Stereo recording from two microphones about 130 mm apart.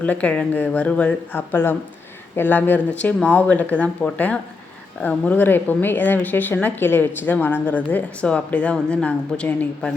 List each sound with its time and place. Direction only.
0.0 s a woman's voice: 10° left (ahead or behind)